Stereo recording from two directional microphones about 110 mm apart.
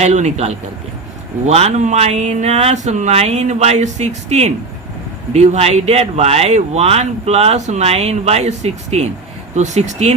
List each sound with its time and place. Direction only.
0.0 s speech: 90° right